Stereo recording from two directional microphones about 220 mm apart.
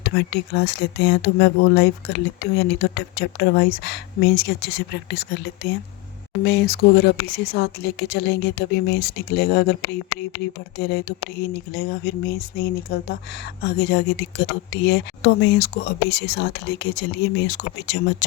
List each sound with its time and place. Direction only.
0.0 s speech: 50° left (ahead or behind)
10.8 s speech: 50° left (ahead or behind)